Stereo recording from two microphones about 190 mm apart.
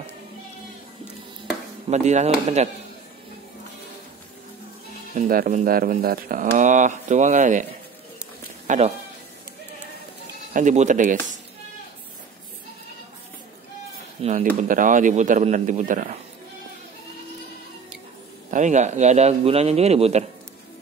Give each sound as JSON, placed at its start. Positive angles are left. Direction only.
{"t": 1.9, "sound": "speech", "side_deg": -35}
{"t": 5.1, "sound": "speech", "side_deg": -45}
{"t": 8.6, "sound": "speech", "side_deg": -35}
{"t": 10.5, "sound": "speech", "side_deg": -40}
{"t": 14.2, "sound": "speech", "side_deg": -40}
{"t": 18.5, "sound": "speech", "side_deg": -40}